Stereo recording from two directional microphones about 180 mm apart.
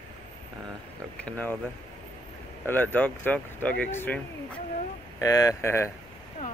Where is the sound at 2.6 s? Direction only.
10° left (ahead or behind).